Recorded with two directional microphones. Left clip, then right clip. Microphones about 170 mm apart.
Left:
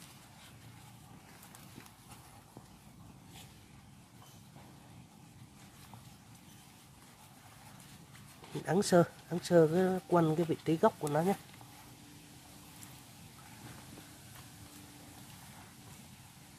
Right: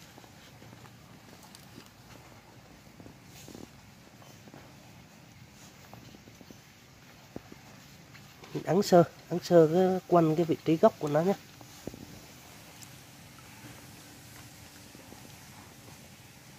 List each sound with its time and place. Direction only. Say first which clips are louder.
8.6 s speech: right 5 dB; 35° right (ahead or behind)